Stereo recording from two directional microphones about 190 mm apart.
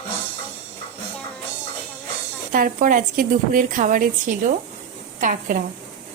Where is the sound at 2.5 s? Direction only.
45° right (ahead or behind).